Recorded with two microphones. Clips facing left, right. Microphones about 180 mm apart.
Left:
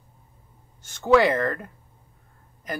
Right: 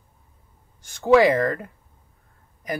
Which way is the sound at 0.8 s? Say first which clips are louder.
Right 2 dB; 10° right (ahead or behind).